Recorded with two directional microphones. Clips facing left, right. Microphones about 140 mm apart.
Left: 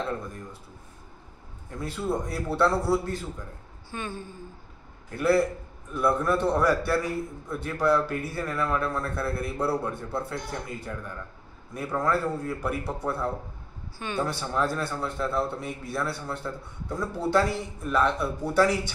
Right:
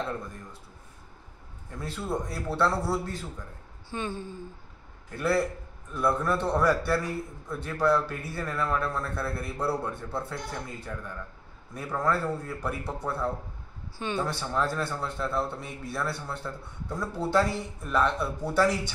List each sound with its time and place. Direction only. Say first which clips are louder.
1.8 s a man's voice: left 3 dB; centre (ahead or behind)
3.9 s speech: right 2 dB; 25° right (ahead or behind)
5.1 s a man's voice: left 4 dB; 5° left (ahead or behind)
11.7 s a man's voice: left 2 dB; centre (ahead or behind)
13.9 s speech: even; 25° right (ahead or behind)
14.2 s a man's voice: left 3 dB; 5° left (ahead or behind)